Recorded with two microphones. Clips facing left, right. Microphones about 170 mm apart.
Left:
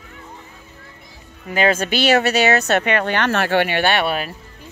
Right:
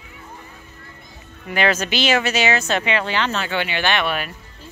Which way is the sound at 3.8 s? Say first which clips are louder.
Left 3 dB; 40° left (ahead or behind).